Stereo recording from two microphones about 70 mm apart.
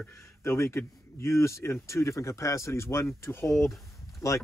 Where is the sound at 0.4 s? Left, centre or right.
Left.